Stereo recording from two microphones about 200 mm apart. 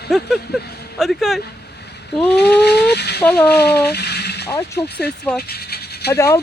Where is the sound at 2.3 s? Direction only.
55° left (ahead or behind).